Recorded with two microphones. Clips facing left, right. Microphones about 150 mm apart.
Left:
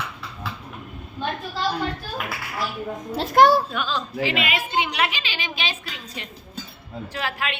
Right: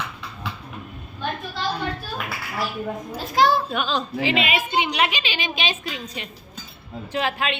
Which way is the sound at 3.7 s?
20° right (ahead or behind).